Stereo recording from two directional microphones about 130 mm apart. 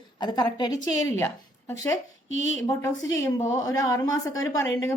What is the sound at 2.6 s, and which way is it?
A woman's voice, 25° left (ahead or behind).